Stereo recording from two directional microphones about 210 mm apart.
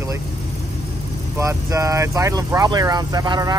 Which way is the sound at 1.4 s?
15° right (ahead or behind).